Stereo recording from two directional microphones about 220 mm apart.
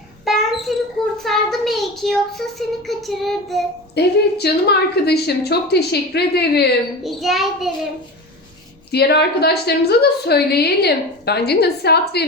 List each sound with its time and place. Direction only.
0.3 s wail: centre (ahead or behind)
1.2 s child singing: centre (ahead or behind)
3.9 s a woman's voice: 50° left (ahead or behind)
7.0 s child singing: centre (ahead or behind)
8.9 s a woman's voice: 50° left (ahead or behind)